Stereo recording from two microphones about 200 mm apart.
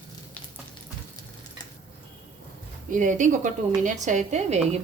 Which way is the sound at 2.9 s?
40° right (ahead or behind).